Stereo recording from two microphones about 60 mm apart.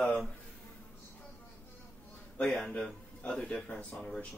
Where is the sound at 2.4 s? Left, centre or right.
Centre.